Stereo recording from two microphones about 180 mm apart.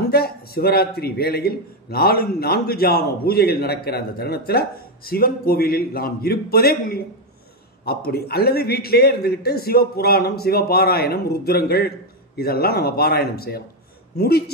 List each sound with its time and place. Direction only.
0.1 s a man's voice: 60° left (ahead or behind)